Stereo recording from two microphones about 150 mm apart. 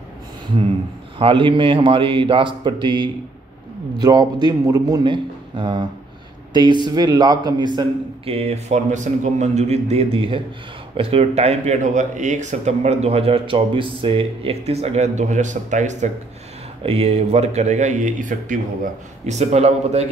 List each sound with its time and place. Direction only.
1.1 s a man's voice: 35° right (ahead or behind)
8.3 s a man's voice: 45° right (ahead or behind)
16.8 s speech: 40° right (ahead or behind)